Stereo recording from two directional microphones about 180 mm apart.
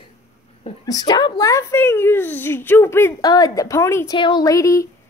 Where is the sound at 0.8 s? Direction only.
20° left (ahead or behind).